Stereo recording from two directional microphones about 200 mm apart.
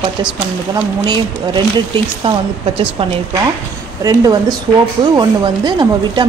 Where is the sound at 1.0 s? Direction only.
20° right (ahead or behind).